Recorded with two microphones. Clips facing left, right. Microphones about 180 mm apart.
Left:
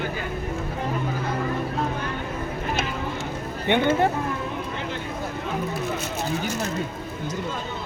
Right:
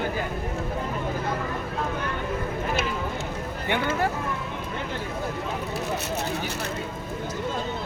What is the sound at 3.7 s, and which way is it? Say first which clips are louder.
Speech: left 6 dB; 25° left (ahead or behind).